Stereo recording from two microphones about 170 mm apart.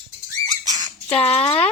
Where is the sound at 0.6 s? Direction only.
20° right (ahead or behind).